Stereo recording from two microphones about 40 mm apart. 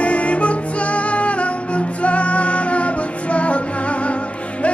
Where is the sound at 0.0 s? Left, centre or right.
Left.